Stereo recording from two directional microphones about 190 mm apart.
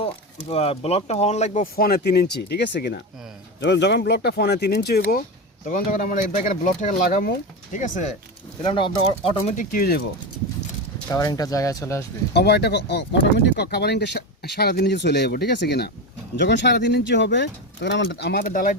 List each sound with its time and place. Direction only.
0.0 s speech: 30° left (ahead or behind); by 5.2 s 55° left (ahead or behind)
5.6 s speech: 45° left (ahead or behind)
8.6 s speech: 25° left (ahead or behind)
9.6 s speech: 50° left (ahead or behind)
11.1 s speech: 20° left (ahead or behind)
12.3 s speech: 60° left (ahead or behind)